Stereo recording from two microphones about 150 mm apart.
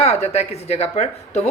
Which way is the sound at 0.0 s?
45° left (ahead or behind).